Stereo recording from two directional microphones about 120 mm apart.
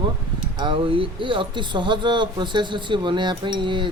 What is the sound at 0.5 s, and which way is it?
Speech, 40° right (ahead or behind).